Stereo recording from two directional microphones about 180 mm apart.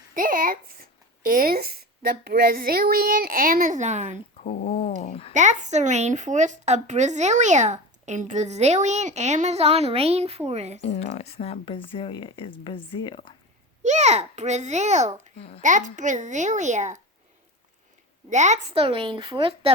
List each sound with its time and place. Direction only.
0.1 s speech: 50° right (ahead or behind)
4.4 s speech: 35° left (ahead or behind)
5.3 s a woman's voice: 40° right (ahead or behind)
10.8 s speech: 35° left (ahead or behind)
13.8 s a woman's voice: 40° right (ahead or behind)
15.4 s speech: 35° left (ahead or behind)
15.6 s speech: 45° right (ahead or behind)
18.3 s a woman's voice: 40° right (ahead or behind)